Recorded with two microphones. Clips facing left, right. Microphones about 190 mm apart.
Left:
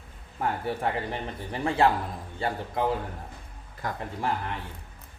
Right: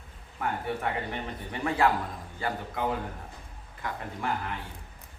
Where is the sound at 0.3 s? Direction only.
30° left (ahead or behind).